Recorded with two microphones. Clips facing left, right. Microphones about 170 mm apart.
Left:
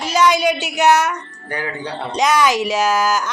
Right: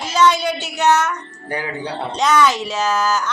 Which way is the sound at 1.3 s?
25° right (ahead or behind).